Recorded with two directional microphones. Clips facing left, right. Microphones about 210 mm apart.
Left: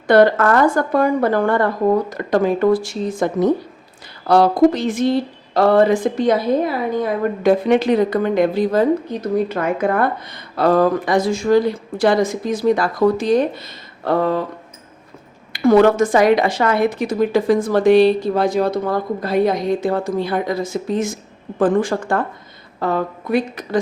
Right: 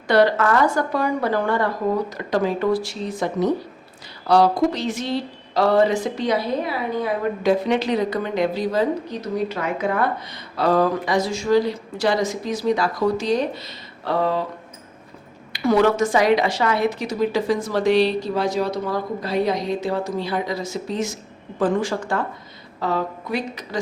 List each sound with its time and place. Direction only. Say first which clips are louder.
0.1 s speech: left 4 dB; 50° left (ahead or behind)
15.5 s speech: left 5 dB; 50° left (ahead or behind)